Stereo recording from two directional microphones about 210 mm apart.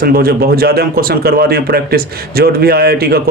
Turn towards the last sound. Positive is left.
turn(degrees=-45)  # may be behind; listen again after turning